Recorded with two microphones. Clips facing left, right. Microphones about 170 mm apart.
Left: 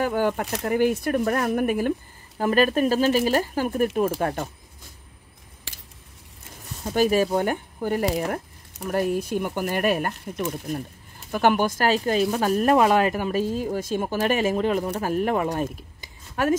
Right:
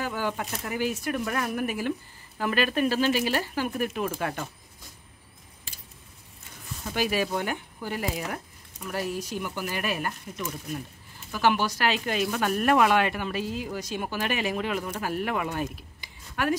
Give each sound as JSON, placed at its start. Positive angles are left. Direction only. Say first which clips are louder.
{"t": 0.0, "sound": "speech", "louder": "left 7 dB", "side_deg": 55}
{"t": 6.8, "sound": "speech", "louder": "left 7 dB", "side_deg": 40}